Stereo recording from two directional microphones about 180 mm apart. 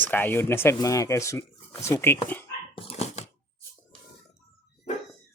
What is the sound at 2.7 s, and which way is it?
Dog, 35° left (ahead or behind).